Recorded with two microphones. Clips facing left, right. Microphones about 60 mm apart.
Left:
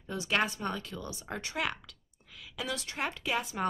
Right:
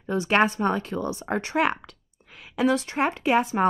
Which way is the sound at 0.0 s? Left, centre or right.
Right.